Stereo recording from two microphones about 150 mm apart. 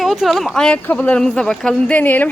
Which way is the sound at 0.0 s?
Centre (ahead or behind).